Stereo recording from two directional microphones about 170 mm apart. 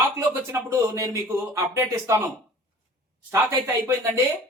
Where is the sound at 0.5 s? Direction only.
20° right (ahead or behind).